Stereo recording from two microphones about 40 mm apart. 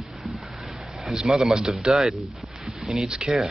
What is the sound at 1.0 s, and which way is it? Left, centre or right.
Speech, centre.